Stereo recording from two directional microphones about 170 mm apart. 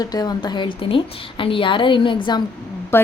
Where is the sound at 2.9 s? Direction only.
15° left (ahead or behind).